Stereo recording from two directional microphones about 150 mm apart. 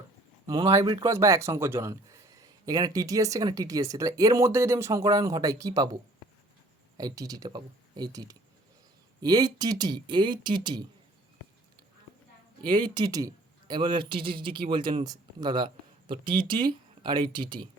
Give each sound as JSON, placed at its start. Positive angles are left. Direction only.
{"t": 0.4, "sound": "speech", "side_deg": -30}
{"t": 1.0, "sound": "speech", "side_deg": -20}
{"t": 12.6, "sound": "speech", "side_deg": -30}